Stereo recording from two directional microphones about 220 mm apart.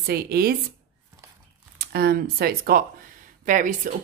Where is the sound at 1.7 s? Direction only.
45° right (ahead or behind).